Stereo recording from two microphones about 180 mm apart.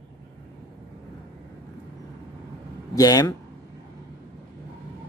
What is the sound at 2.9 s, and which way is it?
Speech, 20° left (ahead or behind).